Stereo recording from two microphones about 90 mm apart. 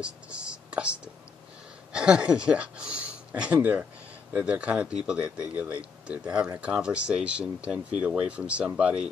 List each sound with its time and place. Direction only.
0.0 s speech: 10° right (ahead or behind)